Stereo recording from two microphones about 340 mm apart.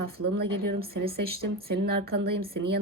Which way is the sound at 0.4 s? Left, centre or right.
Right.